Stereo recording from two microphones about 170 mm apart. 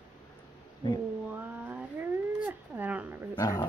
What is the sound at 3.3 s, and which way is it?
Dog, 20° left (ahead or behind).